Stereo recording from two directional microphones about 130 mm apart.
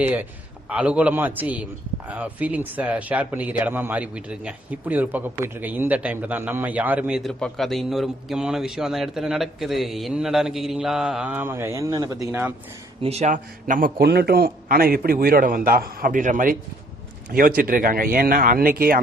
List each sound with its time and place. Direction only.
0.0 s a man's voice: 15° right (ahead or behind)
7.2 s a man's voice: 5° left (ahead or behind); by 12.4 s 25° right (ahead or behind)
13.0 s speech: 55° right (ahead or behind)
13.3 s a man's voice: 85° right